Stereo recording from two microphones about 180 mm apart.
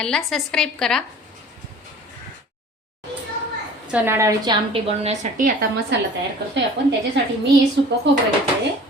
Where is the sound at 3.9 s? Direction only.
10° right (ahead or behind).